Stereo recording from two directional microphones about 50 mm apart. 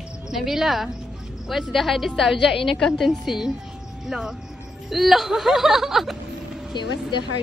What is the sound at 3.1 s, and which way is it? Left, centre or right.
Speech, centre.